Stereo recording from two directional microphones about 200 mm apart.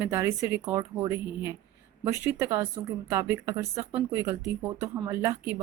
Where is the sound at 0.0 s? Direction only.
10° right (ahead or behind).